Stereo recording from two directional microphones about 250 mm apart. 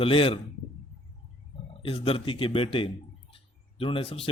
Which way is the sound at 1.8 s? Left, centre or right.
Left.